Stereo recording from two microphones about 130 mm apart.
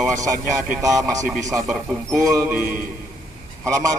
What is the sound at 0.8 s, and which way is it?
Speech, 25° right (ahead or behind).